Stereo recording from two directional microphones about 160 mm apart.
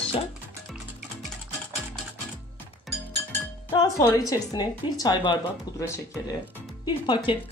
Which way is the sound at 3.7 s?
20° left (ahead or behind).